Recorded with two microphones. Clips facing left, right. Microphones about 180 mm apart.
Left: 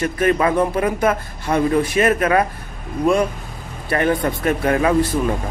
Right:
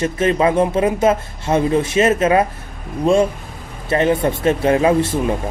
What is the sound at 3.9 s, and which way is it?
Speech, 25° right (ahead or behind).